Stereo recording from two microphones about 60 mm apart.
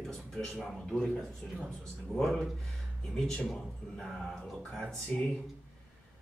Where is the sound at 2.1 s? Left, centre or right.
Centre.